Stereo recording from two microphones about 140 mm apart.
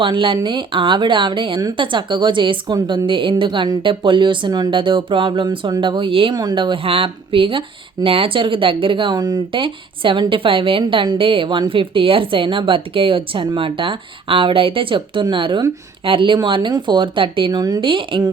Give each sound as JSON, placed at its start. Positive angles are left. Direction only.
{"t": 0.0, "sound": "speech", "side_deg": -35}